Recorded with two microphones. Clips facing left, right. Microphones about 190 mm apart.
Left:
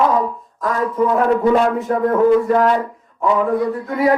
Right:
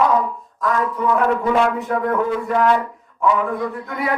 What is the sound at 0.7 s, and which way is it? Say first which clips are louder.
A man's voice: left 4 dB; 40° left (ahead or behind).